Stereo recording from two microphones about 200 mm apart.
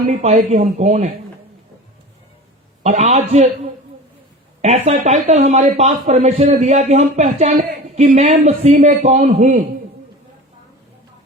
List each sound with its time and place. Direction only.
0.1 s speech: 35° right (ahead or behind)
2.8 s speech: 35° right (ahead or behind)
4.6 s speech: 35° right (ahead or behind)